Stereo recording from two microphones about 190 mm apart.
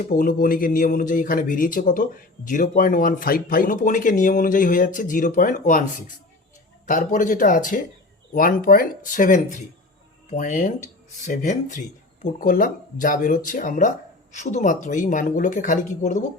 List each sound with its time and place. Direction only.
0.0 s speech: 45° left (ahead or behind)